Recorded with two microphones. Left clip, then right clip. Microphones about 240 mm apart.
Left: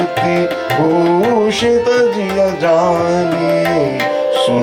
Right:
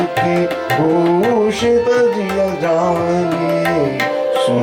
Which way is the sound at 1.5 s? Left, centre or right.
Centre.